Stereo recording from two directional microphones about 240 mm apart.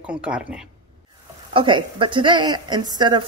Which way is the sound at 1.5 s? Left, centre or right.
Centre.